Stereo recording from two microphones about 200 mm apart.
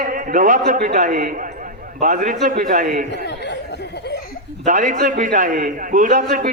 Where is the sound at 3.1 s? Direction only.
60° left (ahead or behind).